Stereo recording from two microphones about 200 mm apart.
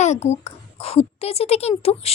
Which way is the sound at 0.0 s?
35° left (ahead or behind).